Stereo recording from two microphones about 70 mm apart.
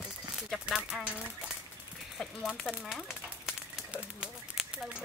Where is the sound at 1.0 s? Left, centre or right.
Centre.